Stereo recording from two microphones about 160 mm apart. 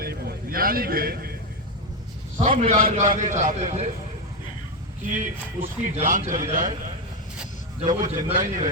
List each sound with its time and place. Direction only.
0.0 s a sound: 75° right (ahead or behind)
2.4 s a man's voice: 50° right (ahead or behind)
5.1 s a man's voice: 50° right (ahead or behind)
7.8 s a man's voice: 50° right (ahead or behind)